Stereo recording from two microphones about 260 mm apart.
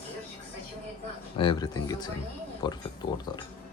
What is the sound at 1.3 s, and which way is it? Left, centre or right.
Speech, centre.